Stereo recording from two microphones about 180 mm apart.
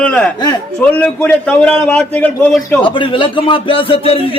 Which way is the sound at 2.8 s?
25° left (ahead or behind).